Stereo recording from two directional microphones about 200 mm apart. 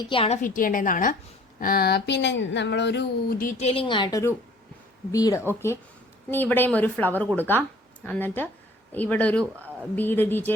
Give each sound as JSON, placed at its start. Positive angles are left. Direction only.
{"t": 0.1, "sound": "a woman's voice", "side_deg": 25}
{"t": 0.4, "sound": "a woman's voice", "side_deg": 40}
{"t": 3.6, "sound": "a woman's voice", "side_deg": 30}